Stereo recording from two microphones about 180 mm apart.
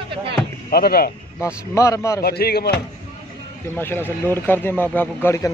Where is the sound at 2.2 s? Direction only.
60° left (ahead or behind).